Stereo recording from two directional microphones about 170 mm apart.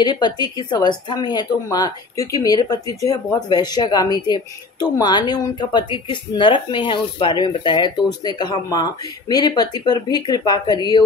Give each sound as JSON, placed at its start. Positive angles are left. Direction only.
{"t": 0.0, "sound": "speech", "side_deg": 25}